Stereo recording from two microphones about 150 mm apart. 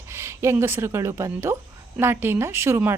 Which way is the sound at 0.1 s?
15° right (ahead or behind).